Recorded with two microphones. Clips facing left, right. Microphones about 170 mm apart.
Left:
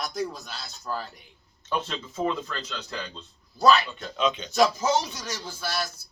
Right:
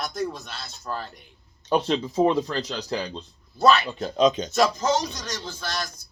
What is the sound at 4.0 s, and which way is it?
Speech, 40° right (ahead or behind).